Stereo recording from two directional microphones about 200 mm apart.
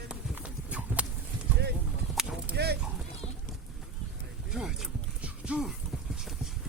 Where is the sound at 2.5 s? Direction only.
55° right (ahead or behind).